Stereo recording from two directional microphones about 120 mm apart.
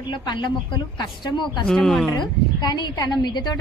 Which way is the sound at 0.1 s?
40° left (ahead or behind).